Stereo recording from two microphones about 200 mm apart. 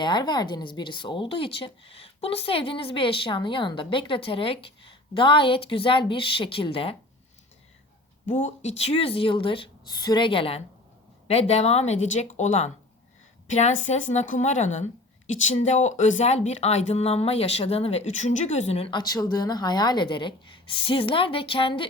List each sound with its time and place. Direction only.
0.0 s speech: 20° left (ahead or behind)
8.3 s speech: 35° left (ahead or behind)